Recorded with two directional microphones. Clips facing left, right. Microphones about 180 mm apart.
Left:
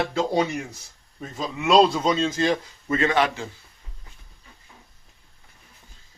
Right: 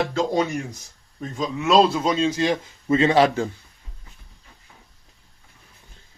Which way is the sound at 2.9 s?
25° right (ahead or behind).